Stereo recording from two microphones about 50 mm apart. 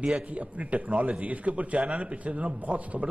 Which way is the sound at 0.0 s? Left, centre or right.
Centre.